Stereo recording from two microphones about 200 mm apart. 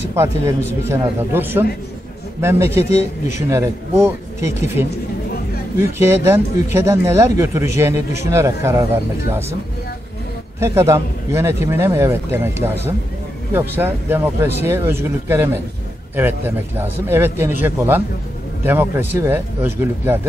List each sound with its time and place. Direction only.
0.1 s speech: 15° right (ahead or behind)
2.9 s speech: 35° left (ahead or behind)
3.4 s speech: 15° right (ahead or behind)
10.6 s speech: 15° right (ahead or behind)